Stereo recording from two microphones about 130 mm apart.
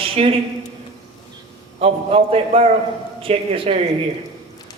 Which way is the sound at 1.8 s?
50° right (ahead or behind).